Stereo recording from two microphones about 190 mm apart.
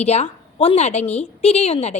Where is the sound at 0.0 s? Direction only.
35° left (ahead or behind).